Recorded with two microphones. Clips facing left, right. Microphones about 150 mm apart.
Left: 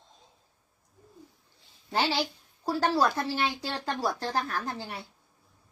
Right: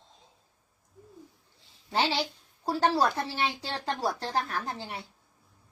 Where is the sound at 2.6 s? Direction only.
30° right (ahead or behind).